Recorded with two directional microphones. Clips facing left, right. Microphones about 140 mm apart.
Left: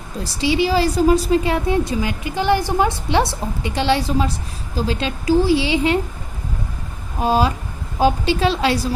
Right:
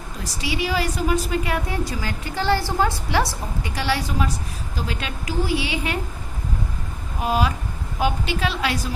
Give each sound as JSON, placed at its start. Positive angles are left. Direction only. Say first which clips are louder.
{"t": 0.2, "sound": "a woman's voice", "louder": "left 8 dB", "side_deg": 30}
{"t": 7.2, "sound": "a woman's voice", "louder": "left 5 dB", "side_deg": 30}